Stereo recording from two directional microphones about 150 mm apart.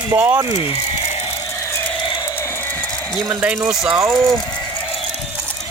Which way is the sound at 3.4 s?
5° right (ahead or behind).